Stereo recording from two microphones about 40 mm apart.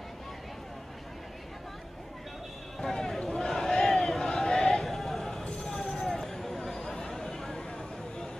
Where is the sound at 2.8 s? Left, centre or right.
Centre.